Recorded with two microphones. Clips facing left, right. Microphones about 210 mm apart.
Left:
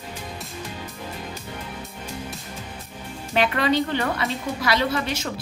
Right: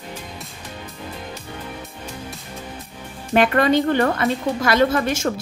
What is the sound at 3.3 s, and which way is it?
A woman's voice, 50° right (ahead or behind).